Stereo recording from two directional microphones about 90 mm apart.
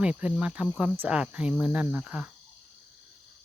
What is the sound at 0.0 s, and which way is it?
Speech, 10° right (ahead or behind).